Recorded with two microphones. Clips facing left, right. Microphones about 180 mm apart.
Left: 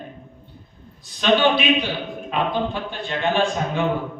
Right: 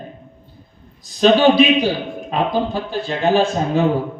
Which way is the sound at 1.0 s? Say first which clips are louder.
Right 6 dB; 40° right (ahead or behind).